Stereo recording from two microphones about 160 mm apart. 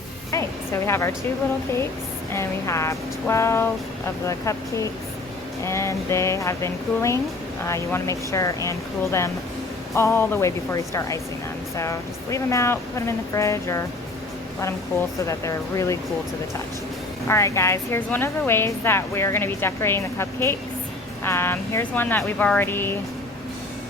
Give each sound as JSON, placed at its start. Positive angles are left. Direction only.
{"t": 0.3, "sound": "a sound", "side_deg": 20}
{"t": 2.3, "sound": "a woman's voice", "side_deg": 20}
{"t": 9.9, "sound": "a woman's voice", "side_deg": 15}
{"t": 15.3, "sound": "speech", "side_deg": 20}
{"t": 17.2, "sound": "a woman's voice", "side_deg": 20}